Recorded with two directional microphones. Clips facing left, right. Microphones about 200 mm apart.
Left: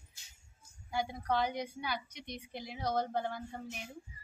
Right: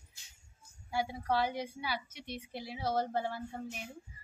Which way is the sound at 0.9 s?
5° right (ahead or behind).